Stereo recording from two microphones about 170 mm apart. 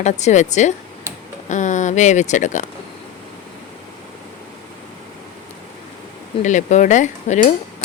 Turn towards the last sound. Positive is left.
turn(degrees=45)  # may be behind; listen again after turning